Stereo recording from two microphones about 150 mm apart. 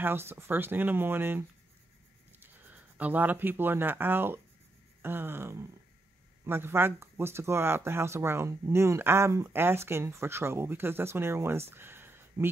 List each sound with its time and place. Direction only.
0.0 s speech: 15° right (ahead or behind)
2.4 s speech: 10° right (ahead or behind)